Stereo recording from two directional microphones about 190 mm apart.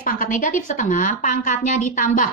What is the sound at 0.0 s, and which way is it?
A woman's voice, 45° left (ahead or behind).